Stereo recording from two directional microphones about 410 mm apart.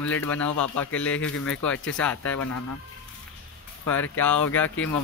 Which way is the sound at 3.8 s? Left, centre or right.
Centre.